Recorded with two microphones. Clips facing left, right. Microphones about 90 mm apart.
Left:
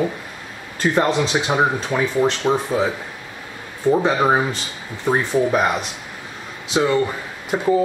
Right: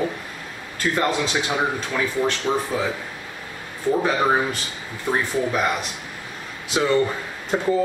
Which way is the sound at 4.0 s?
20° left (ahead or behind).